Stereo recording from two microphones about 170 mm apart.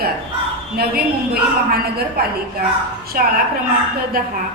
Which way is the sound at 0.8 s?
65° right (ahead or behind).